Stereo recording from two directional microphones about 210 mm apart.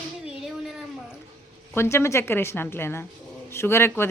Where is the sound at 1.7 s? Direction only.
10° left (ahead or behind).